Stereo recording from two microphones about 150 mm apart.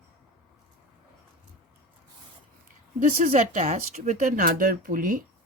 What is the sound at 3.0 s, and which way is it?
Speech, 55° right (ahead or behind).